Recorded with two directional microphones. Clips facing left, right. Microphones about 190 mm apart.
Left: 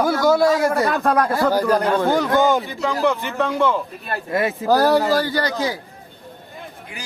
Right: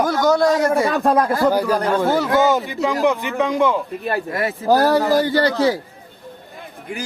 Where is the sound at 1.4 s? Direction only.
5° right (ahead or behind).